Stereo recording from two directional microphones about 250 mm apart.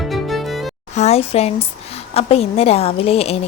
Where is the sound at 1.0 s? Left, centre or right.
Left.